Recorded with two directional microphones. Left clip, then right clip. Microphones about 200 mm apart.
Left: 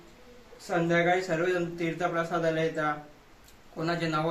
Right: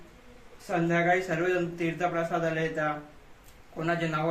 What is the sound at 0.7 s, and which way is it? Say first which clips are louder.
A man's voice: even; 15° right (ahead or behind).